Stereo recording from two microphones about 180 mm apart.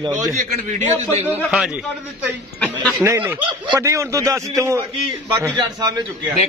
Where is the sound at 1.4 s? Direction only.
5° right (ahead or behind).